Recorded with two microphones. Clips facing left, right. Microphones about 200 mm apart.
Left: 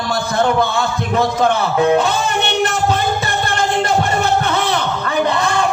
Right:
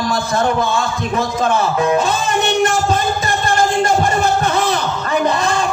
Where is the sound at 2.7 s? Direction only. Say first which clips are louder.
Even; 60° left (ahead or behind).